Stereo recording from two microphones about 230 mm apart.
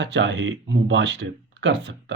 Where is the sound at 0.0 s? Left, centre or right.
Right.